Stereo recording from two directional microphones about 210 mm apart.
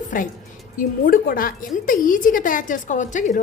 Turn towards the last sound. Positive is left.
turn(degrees=35)  # may be behind; listen again after turning